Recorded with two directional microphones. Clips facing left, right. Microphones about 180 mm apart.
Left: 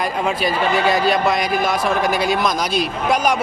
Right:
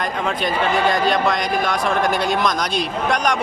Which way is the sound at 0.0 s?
10° left (ahead or behind).